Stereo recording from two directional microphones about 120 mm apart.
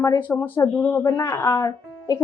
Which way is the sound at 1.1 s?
25° left (ahead or behind).